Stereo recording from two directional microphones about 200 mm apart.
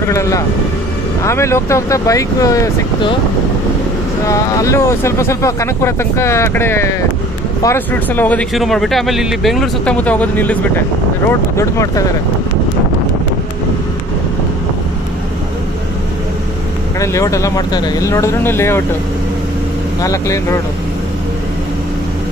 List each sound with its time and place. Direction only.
0.0 s speech: 15° left (ahead or behind)
4.3 s speech: 15° left (ahead or behind)
17.0 s speech: 15° left (ahead or behind)
20.0 s speech: 15° left (ahead or behind)